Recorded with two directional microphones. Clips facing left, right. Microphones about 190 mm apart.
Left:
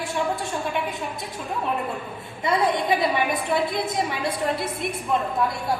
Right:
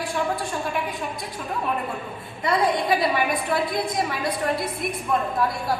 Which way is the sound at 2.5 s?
25° left (ahead or behind).